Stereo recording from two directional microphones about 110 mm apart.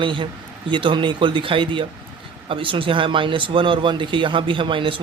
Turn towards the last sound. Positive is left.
turn(degrees=-50)  # may be behind; listen again after turning